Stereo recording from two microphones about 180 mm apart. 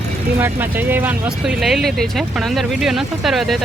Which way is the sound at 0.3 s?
10° right (ahead or behind).